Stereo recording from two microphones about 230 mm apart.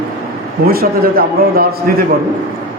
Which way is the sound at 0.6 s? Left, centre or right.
Right.